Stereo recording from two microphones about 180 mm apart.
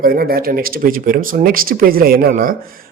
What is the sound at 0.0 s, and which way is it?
A man's voice, 55° right (ahead or behind).